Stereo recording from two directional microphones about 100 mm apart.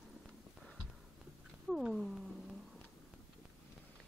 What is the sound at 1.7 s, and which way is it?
Cat, centre (ahead or behind).